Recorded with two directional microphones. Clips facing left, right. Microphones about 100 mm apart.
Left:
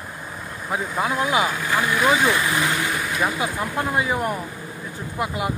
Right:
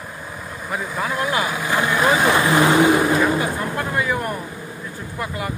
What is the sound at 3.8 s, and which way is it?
Speech, 20° left (ahead or behind).